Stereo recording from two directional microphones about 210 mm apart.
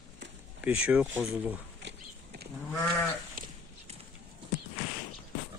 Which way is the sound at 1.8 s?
55° right (ahead or behind).